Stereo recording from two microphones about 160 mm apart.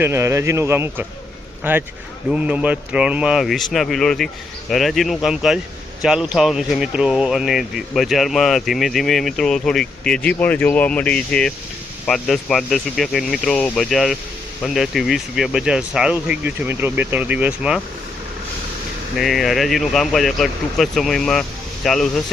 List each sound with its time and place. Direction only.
0.0 s speech: 15° right (ahead or behind)
19.1 s speech: centre (ahead or behind)